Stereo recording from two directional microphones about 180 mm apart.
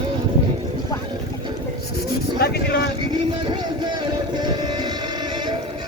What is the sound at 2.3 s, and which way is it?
Speech, 60° left (ahead or behind).